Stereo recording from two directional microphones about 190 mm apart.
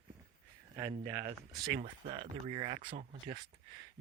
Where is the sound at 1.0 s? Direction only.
20° right (ahead or behind).